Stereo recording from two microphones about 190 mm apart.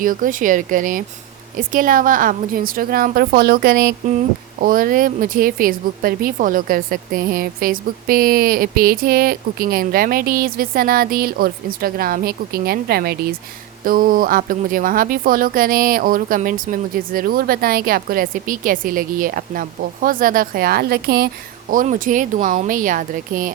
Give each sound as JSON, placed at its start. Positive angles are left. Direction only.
{"t": 0.0, "sound": "a woman's voice", "side_deg": -45}
{"t": 21.7, "sound": "a woman's voice", "side_deg": -45}